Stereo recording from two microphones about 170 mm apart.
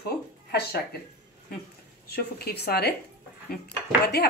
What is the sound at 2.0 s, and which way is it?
Speech, 65° left (ahead or behind).